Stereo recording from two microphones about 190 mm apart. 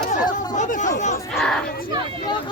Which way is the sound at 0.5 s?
40° left (ahead or behind).